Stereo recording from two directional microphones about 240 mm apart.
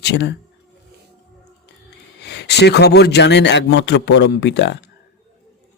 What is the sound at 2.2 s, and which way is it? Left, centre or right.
Speech, left.